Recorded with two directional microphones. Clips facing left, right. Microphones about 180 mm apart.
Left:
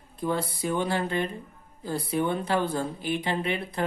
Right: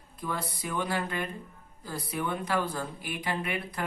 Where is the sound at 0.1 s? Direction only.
30° left (ahead or behind).